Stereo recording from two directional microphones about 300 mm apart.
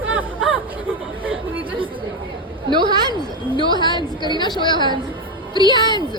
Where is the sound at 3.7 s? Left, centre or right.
Centre.